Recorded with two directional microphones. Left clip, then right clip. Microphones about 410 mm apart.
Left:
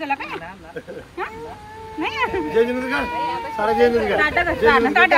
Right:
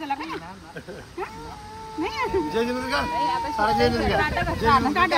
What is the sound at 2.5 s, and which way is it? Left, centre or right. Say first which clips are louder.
Speech: left 5 dB; centre.